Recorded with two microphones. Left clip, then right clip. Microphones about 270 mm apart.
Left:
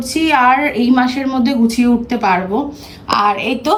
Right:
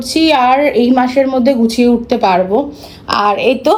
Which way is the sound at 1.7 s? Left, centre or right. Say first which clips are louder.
Right 4 dB; right.